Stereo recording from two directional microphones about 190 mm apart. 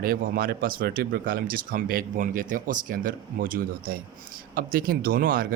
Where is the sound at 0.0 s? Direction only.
50° right (ahead or behind).